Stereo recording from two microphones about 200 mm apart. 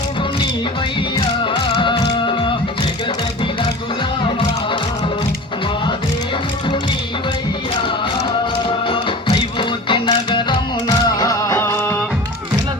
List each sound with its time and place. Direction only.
1.7 s music: 25° left (ahead or behind)
8.9 s music: 25° left (ahead or behind)